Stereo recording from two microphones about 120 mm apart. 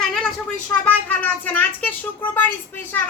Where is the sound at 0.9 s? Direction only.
10° left (ahead or behind).